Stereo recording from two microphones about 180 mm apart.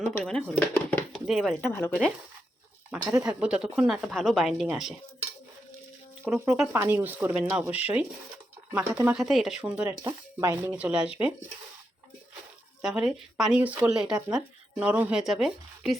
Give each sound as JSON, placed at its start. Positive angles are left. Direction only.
{"t": 0.1, "sound": "speech", "side_deg": 5}
{"t": 1.6, "sound": "speech", "side_deg": 10}
{"t": 2.9, "sound": "speech", "side_deg": -15}
{"t": 3.2, "sound": "speech", "side_deg": -5}
{"t": 6.2, "sound": "speech", "side_deg": -15}
{"t": 12.8, "sound": "speech", "side_deg": 0}